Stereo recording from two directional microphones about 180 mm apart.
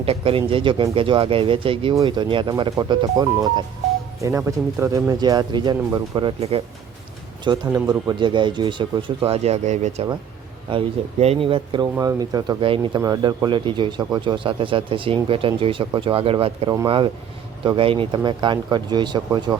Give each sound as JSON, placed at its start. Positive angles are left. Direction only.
{"t": 0.0, "sound": "speech", "side_deg": -30}